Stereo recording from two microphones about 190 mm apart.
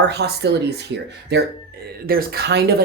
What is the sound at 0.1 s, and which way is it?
Speech, 60° right (ahead or behind).